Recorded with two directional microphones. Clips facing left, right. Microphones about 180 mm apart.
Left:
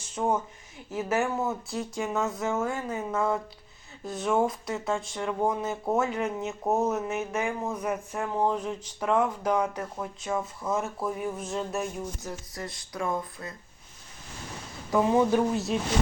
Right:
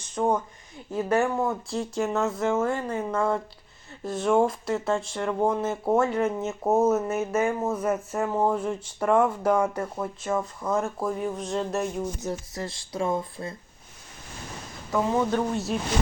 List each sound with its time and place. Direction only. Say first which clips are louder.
0.2 s speech: right 3 dB; 10° left (ahead or behind)
12.2 s speech: right 5 dB; 25° right (ahead or behind)
14.8 s speech: left 2 dB; 15° left (ahead or behind); by 15.8 s centre (ahead or behind)